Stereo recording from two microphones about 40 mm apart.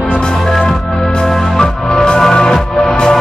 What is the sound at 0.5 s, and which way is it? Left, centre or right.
Music, centre.